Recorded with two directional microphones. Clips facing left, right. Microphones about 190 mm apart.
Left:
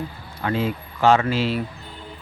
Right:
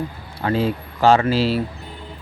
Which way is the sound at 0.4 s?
35° right (ahead or behind).